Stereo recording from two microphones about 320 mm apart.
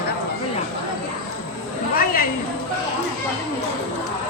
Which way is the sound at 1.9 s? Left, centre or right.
Left.